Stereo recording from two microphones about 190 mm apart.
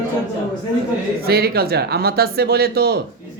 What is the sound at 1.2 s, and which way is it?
Speech, 55° right (ahead or behind).